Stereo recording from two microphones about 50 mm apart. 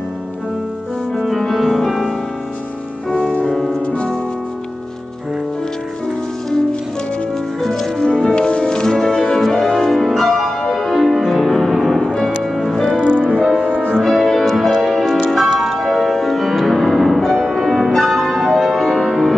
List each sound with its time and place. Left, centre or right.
1.1 s music: centre
3.8 s music: left
7.6 s music: centre
12.8 s music: centre
13.1 s music: centre
13.9 s music: centre